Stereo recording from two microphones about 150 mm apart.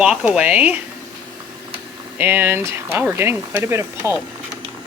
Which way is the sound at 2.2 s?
15° right (ahead or behind).